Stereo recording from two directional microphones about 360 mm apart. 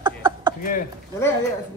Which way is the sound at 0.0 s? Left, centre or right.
Centre.